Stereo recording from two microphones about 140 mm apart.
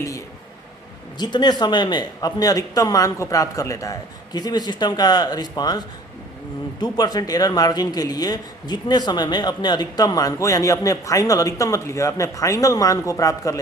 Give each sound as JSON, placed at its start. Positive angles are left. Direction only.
{"t": 1.2, "sound": "a man's voice", "side_deg": 30}